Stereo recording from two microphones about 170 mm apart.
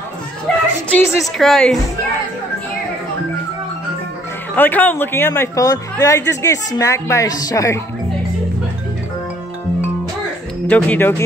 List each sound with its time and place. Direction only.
0.5 s music: 5° left (ahead or behind)
0.9 s speech: 15° left (ahead or behind)
1.4 s a woman's voice: centre (ahead or behind)
4.6 s speech: 10° left (ahead or behind)
10.7 s speech: 10° left (ahead or behind)